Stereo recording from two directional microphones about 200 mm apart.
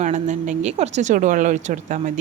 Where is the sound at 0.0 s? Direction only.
40° right (ahead or behind).